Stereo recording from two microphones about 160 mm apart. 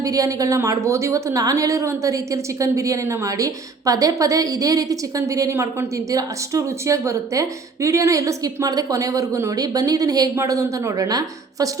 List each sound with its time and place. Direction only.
0.0 s a woman's voice: 20° right (ahead or behind)